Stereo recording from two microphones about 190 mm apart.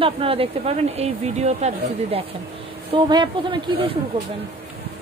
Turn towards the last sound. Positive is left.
turn(degrees=-25)  # may be behind; listen again after turning